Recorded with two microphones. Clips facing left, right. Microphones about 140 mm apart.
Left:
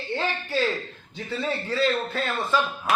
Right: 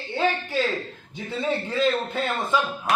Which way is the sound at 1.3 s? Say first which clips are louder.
Right 2 dB; 20° right (ahead or behind).